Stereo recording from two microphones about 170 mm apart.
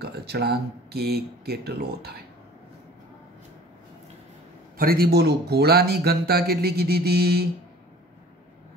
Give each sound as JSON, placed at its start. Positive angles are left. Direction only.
{"t": 0.0, "sound": "speech", "side_deg": -70}
{"t": 4.7, "sound": "speech", "side_deg": -60}